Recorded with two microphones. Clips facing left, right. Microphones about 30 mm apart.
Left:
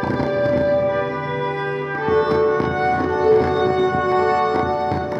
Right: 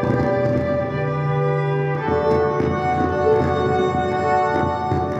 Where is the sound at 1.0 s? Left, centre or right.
Left.